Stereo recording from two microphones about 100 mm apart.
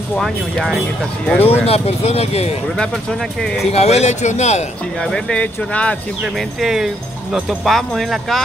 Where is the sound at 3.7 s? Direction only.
90° left.